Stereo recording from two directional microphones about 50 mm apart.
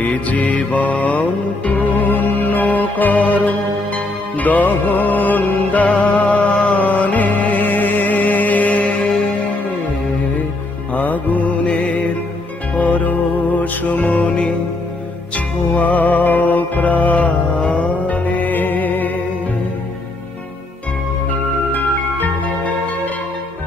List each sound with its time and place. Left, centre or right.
0.0 s music: left
10.9 s music: left